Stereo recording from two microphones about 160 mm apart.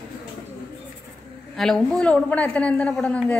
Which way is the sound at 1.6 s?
5° left (ahead or behind).